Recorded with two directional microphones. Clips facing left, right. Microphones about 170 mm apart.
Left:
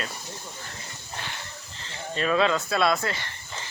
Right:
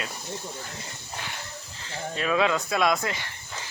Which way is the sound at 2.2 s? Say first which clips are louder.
Left 1 dB; 5° right (ahead or behind).